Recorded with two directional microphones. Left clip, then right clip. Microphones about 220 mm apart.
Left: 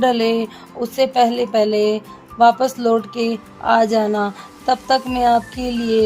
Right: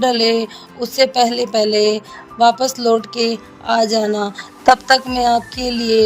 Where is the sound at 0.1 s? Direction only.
30° right (ahead or behind).